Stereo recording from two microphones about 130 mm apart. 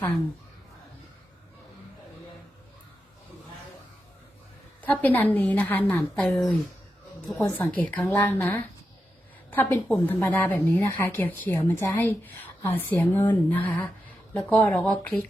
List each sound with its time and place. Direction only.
4.8 s a woman's voice: 10° left (ahead or behind)
7.3 s a woman's voice: 20° left (ahead or behind)